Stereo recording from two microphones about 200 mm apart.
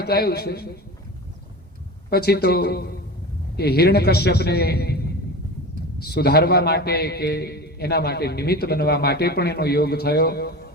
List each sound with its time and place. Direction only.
0.0 s a man's voice: 50° left (ahead or behind)
2.0 s a man's voice: 50° left (ahead or behind)
6.0 s a man's voice: 55° left (ahead or behind)